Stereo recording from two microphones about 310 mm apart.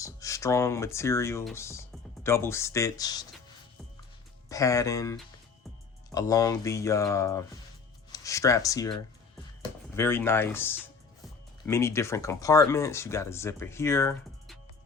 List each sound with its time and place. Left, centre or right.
0.0 s speech: centre
4.4 s speech: centre